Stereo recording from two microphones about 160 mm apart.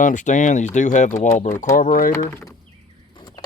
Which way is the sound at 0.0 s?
50° left (ahead or behind).